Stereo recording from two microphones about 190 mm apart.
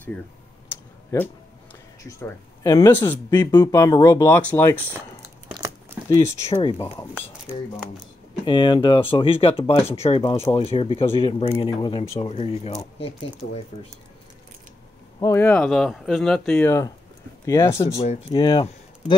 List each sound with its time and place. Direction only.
1.1 s speech: 15° left (ahead or behind)
5.5 s a sound: 15° right (ahead or behind)
6.2 s speech: 30° left (ahead or behind)
8.5 s speech: 25° left (ahead or behind)
10.3 s speech: 15° left (ahead or behind)
10.6 s speech: 30° left (ahead or behind)
15.1 s speech: 15° left (ahead or behind)
15.6 s speech: centre (ahead or behind)
18.3 s speech: 25° left (ahead or behind)